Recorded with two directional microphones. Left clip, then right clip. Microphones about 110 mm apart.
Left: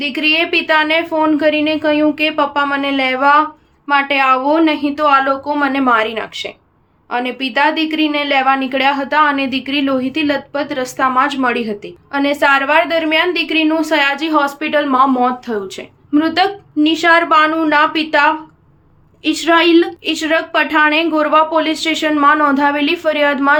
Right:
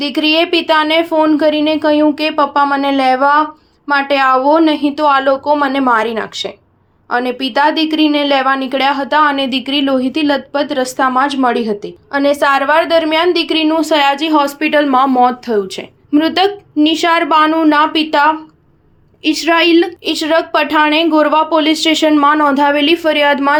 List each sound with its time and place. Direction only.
0.0 s a woman's voice: 35° right (ahead or behind)
14.6 s a woman's voice: 55° right (ahead or behind)
19.2 s a woman's voice: 20° right (ahead or behind); by 23.4 s 55° right (ahead or behind)